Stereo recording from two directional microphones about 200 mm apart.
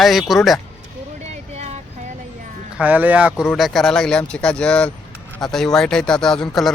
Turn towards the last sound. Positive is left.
turn(degrees=5)  # may be behind; listen again after turning